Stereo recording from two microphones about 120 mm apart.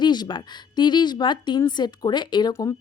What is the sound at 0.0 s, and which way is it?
A woman's voice, 40° left (ahead or behind).